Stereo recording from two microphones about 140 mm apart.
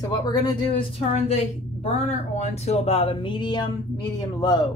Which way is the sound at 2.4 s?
50° left (ahead or behind).